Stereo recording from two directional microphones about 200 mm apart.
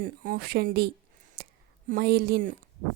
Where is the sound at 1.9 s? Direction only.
50° right (ahead or behind).